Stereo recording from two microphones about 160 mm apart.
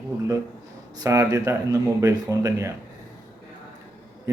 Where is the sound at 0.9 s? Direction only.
20° right (ahead or behind).